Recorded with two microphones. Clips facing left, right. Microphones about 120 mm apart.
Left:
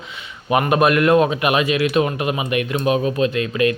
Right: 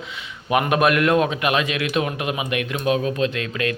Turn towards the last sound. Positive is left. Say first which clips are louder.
# left 5 dB
turn(degrees=5)  # may be behind; listen again after turning